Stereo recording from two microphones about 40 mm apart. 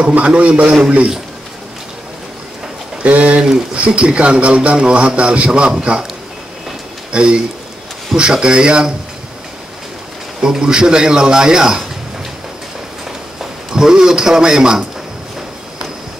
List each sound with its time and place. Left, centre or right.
0.1 s a man's voice: right
3.0 s a man's voice: right
7.1 s a man's voice: right
10.4 s a man's voice: centre
13.4 s a man's voice: centre